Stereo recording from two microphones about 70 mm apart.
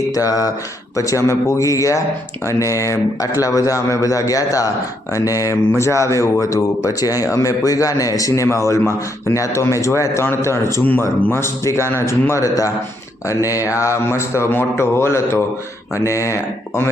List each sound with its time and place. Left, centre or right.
0.1 s a man's voice: left
13.2 s speech: left